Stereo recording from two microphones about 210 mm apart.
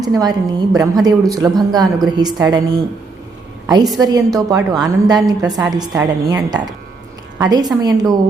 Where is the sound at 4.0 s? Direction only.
15° right (ahead or behind).